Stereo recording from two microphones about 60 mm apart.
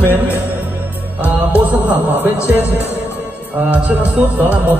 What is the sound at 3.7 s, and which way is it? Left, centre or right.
Music, right.